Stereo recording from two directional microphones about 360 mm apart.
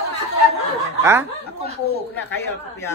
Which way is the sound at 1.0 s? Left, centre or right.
Centre.